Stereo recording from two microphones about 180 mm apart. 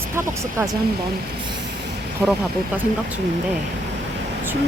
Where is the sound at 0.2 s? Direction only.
20° right (ahead or behind).